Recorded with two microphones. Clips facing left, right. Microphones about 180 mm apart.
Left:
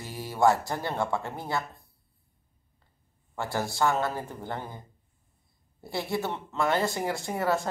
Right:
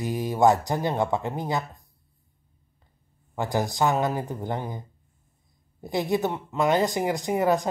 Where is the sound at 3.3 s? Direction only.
15° right (ahead or behind).